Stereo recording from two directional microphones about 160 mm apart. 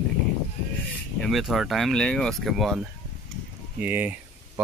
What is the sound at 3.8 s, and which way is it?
Speech, 10° right (ahead or behind).